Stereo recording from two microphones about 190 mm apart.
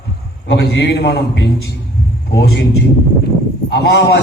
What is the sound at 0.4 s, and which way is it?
Speech, 65° left (ahead or behind).